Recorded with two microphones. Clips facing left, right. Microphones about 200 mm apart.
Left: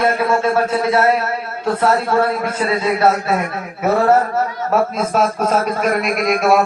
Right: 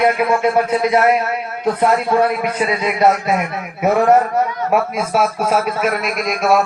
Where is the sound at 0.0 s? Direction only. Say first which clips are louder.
Right 1 dB; 15° right (ahead or behind).